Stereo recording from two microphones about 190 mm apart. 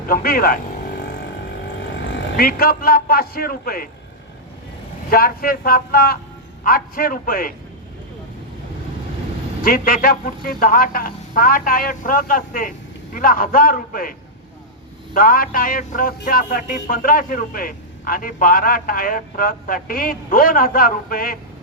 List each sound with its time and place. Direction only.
0.1 s a sound: 50° left (ahead or behind)
2.3 s a man's voice: 50° left (ahead or behind)
5.1 s a man's voice: 50° left (ahead or behind)
9.6 s a man's voice: 50° left (ahead or behind)